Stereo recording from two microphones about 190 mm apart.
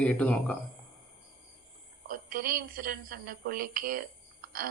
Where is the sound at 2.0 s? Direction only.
45° right (ahead or behind).